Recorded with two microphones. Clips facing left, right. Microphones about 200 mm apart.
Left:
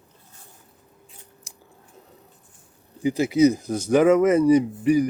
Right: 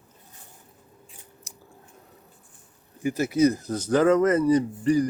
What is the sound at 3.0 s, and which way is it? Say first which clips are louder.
Speech: left 3 dB; 15° left (ahead or behind).